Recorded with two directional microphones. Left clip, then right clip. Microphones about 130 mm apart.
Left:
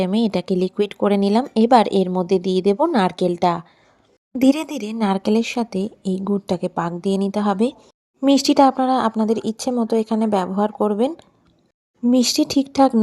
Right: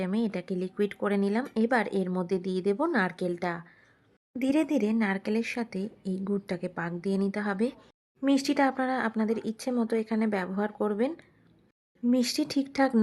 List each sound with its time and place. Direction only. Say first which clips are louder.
0.0 s a woman's voice: left 11 dB; 40° left (ahead or behind)
4.4 s a woman's voice: left 8 dB; 55° left (ahead or behind)
5.2 s speech: left 10 dB; 40° left (ahead or behind)
6.6 s speech: left 11 dB; 5° right (ahead or behind)
8.2 s a woman's voice: left 11 dB; 50° left (ahead or behind); by 11.1 s 30° left (ahead or behind)
12.1 s speech: left 10 dB; 40° left (ahead or behind)